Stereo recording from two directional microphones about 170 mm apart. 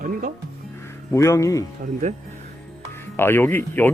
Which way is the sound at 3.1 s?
10° left (ahead or behind).